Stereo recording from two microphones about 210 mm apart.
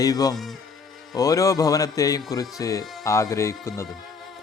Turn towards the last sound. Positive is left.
turn(degrees=15)  # may be behind; listen again after turning